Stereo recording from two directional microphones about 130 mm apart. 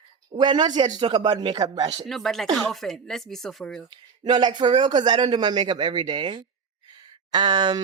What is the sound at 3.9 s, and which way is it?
Speech, 35° right (ahead or behind).